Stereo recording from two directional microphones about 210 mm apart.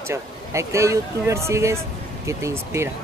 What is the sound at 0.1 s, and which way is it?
Speech, 15° right (ahead or behind).